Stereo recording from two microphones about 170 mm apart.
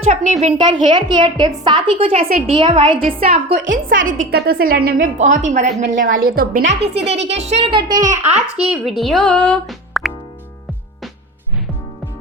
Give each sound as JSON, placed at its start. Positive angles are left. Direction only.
{"t": 0.0, "sound": "a child's voice", "side_deg": -40}
{"t": 0.5, "sound": "a woman's voice", "side_deg": -25}
{"t": 3.7, "sound": "a woman's voice", "side_deg": -55}
{"t": 5.1, "sound": "a woman's voice", "side_deg": -45}
{"t": 6.7, "sound": "a child's voice", "side_deg": -35}
{"t": 8.4, "sound": "speech", "side_deg": -5}